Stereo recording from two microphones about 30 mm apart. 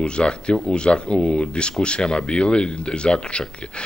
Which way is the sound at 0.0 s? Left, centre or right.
Left.